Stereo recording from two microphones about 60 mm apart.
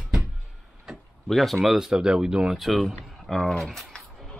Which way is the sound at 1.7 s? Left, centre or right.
Centre.